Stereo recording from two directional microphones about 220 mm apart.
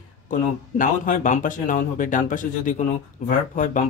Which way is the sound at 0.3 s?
35° left (ahead or behind).